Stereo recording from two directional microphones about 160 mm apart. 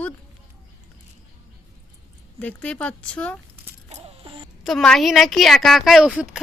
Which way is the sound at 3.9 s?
35° right (ahead or behind).